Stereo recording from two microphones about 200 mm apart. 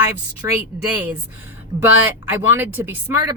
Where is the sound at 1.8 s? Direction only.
10° right (ahead or behind).